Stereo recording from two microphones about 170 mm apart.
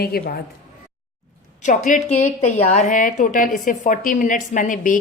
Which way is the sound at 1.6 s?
50° left (ahead or behind).